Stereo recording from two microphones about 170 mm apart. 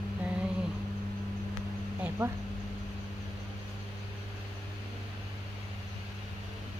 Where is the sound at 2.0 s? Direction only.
15° right (ahead or behind).